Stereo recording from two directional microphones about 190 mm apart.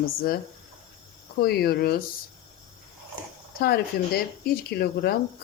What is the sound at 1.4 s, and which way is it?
Speech, 55° left (ahead or behind).